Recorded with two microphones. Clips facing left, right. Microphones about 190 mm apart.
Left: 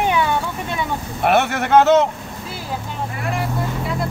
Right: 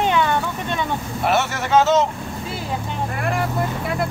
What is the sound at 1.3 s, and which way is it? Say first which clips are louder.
Speech: left 4 dB; 60° left (ahead or behind).